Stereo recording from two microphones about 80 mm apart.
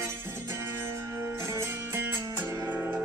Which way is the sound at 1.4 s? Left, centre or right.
Right.